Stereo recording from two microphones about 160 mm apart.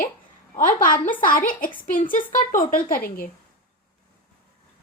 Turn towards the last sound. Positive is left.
turn(degrees=65)  # may be behind; listen again after turning